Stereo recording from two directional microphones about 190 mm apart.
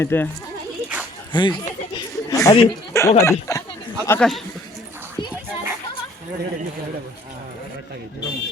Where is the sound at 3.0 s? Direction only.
15° left (ahead or behind).